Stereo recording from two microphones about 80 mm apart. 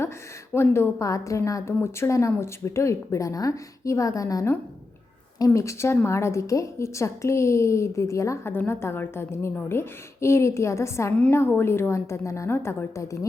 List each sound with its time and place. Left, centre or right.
0.5 s a woman's voice: left
5.5 s a woman's voice: left